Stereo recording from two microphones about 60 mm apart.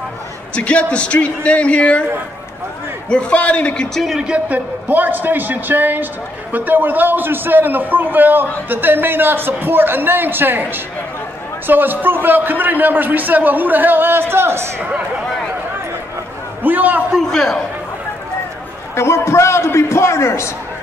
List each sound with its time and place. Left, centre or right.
0.6 s a man's voice: centre
3.1 s a man's voice: centre
3.9 s a man's voice: centre
4.5 s a man's voice: right
14.3 s a man's voice: right
14.8 s speech: right
16.6 s a man's voice: right
17.3 s a man's voice: centre
18.9 s a man's voice: left